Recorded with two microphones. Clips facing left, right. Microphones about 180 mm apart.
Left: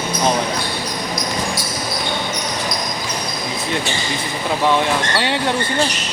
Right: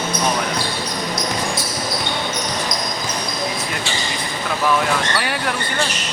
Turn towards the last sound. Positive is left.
turn(degrees=25)  # may be behind; listen again after turning